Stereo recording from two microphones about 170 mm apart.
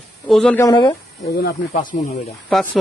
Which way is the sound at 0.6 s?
20° left (ahead or behind).